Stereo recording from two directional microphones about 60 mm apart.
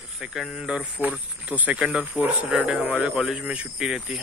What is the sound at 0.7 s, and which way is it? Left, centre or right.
Speech, right.